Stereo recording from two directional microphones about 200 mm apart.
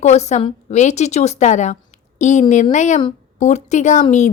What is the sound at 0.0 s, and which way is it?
Speech, 35° left (ahead or behind).